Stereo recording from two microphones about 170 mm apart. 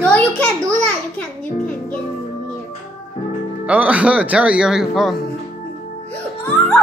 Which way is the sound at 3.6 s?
10° right (ahead or behind).